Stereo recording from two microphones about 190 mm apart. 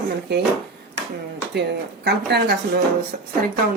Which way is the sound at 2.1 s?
60° right (ahead or behind).